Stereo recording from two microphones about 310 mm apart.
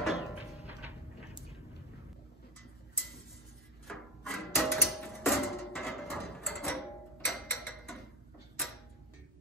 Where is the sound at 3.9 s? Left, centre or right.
Centre.